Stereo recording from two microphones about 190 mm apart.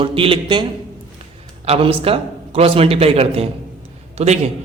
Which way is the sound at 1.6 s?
30° right (ahead or behind).